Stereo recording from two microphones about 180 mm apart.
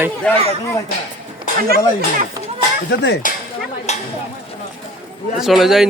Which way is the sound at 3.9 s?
40° left (ahead or behind).